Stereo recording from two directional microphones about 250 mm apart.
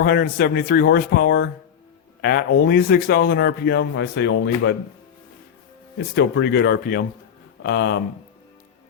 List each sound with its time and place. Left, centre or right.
0.0 s a man's voice: left
6.1 s a man's voice: left